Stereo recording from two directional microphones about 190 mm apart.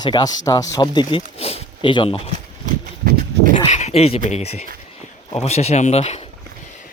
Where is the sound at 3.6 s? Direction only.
35° left (ahead or behind).